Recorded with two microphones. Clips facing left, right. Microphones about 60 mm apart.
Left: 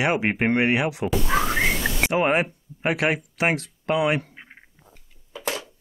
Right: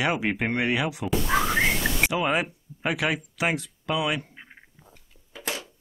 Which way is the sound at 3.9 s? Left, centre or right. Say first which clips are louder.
Left 5 dB; left.